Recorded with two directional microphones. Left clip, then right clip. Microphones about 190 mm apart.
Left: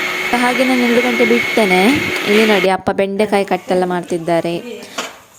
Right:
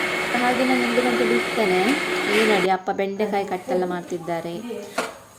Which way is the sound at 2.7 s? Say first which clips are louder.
Left 7 dB; 55° left (ahead or behind).